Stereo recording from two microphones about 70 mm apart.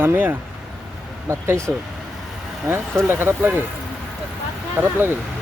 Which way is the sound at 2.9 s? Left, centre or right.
Right.